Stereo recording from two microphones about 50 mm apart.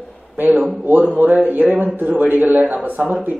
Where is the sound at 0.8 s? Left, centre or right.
Right.